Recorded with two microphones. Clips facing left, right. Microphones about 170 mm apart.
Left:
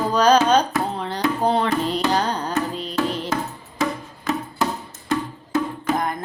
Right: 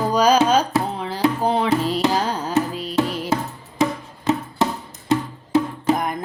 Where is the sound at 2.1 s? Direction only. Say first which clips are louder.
Even; 5° right (ahead or behind).